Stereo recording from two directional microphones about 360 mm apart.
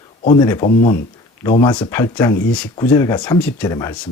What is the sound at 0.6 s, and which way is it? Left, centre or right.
Speech, left.